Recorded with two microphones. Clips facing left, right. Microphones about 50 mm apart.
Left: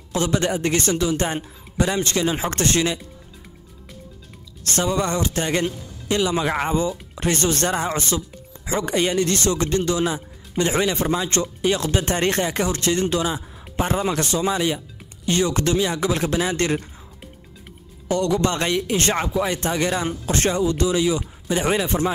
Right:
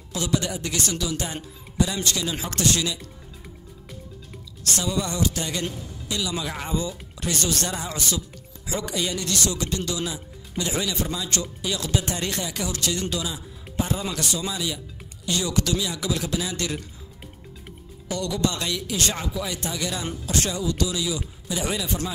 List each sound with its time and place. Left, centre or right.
0.1 s speech: left
4.6 s speech: left
18.0 s speech: left